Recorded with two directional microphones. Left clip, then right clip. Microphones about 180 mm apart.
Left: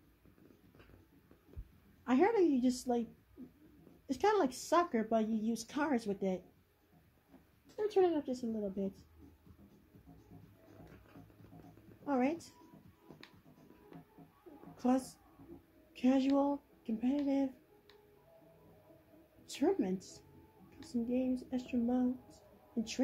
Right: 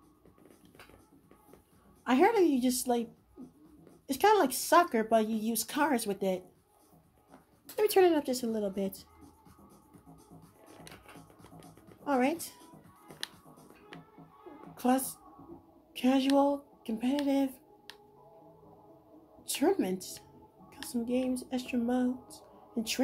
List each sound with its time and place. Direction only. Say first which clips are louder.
2.0 s speech: right 5 dB; 5° right (ahead or behind)
4.1 s speech: right 6 dB; centre (ahead or behind)
7.7 s speech: right 7 dB; 25° right (ahead or behind)
12.0 s speech: right 5 dB; 5° right (ahead or behind)
14.8 s speech: right 5 dB; centre (ahead or behind)
15.9 s a sound: right 4 dB; centre (ahead or behind)
16.3 s speech: right 7 dB; centre (ahead or behind)
19.4 s speech: right 5 dB; 5° right (ahead or behind)